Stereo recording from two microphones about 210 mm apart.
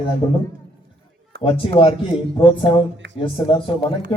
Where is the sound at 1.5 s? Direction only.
25° left (ahead or behind).